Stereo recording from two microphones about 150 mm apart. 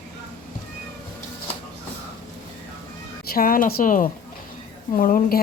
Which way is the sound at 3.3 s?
75° left (ahead or behind).